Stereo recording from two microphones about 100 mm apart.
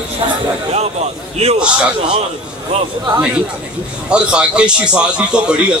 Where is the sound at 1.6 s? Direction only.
10° right (ahead or behind).